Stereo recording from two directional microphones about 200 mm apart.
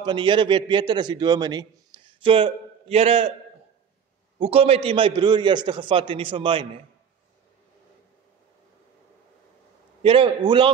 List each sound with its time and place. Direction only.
0.0 s a man's voice: 25° right (ahead or behind)
4.4 s a man's voice: 30° right (ahead or behind)
10.0 s a man's voice: 25° right (ahead or behind)